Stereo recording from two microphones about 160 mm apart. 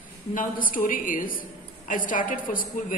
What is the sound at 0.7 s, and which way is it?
A woman's voice, 55° left (ahead or behind).